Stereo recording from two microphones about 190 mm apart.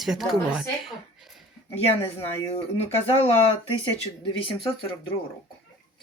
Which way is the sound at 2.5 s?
35° left (ahead or behind).